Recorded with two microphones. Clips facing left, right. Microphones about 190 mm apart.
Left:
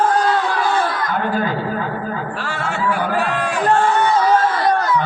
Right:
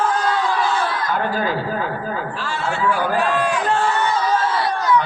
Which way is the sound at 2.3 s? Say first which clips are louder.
Even; 55° left (ahead or behind).